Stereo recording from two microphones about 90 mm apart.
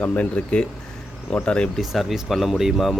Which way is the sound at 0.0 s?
15° left (ahead or behind).